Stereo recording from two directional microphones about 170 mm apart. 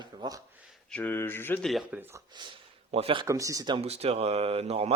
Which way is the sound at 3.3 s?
20° right (ahead or behind).